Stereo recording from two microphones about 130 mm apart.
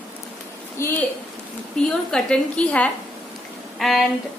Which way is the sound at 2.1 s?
5° left (ahead or behind).